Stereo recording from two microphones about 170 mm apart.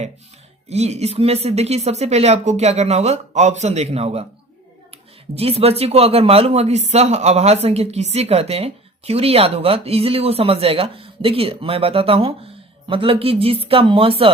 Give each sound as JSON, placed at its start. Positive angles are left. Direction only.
{"t": 0.7, "sound": "speech", "side_deg": -40}
{"t": 5.3, "sound": "speech", "side_deg": -35}